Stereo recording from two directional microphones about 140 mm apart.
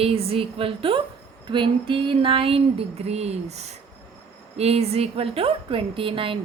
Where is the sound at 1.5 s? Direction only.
35° right (ahead or behind); by 3.7 s 50° right (ahead or behind).